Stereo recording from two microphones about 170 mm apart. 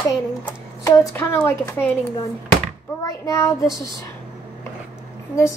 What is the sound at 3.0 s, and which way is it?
Speech, 20° left (ahead or behind).